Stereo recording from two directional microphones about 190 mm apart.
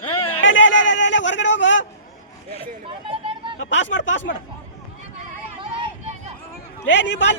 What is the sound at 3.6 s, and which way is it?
Speech, 80° left.